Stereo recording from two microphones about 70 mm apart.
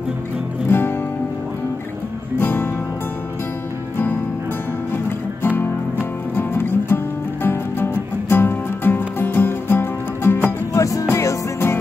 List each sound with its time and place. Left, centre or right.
0.7 s music: left
2.3 s music: left
6.3 s music: left
10.7 s music: left